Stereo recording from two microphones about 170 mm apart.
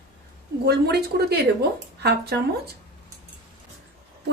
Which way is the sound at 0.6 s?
70° right (ahead or behind).